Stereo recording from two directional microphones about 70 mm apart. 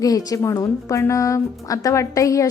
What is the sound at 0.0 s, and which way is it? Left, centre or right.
A woman's voice, left.